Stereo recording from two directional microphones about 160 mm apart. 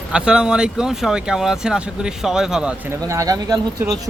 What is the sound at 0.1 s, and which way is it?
Speech, 5° right (ahead or behind).